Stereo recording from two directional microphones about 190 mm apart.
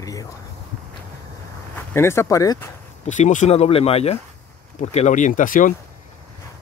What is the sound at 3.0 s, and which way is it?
Speech, 40° left (ahead or behind).